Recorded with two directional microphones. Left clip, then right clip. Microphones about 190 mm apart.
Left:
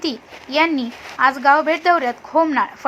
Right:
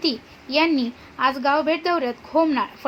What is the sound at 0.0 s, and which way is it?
Speech, 15° left (ahead or behind).